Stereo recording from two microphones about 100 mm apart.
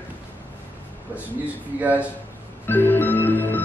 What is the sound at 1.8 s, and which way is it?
Speech, 15° right (ahead or behind).